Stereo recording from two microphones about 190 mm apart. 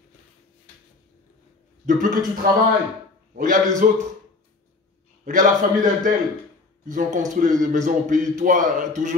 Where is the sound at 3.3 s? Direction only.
45° right (ahead or behind).